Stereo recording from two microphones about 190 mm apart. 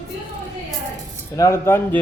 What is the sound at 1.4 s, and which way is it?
Speech, 15° left (ahead or behind).